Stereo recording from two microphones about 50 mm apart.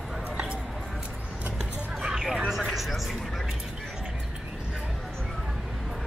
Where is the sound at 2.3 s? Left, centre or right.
Centre.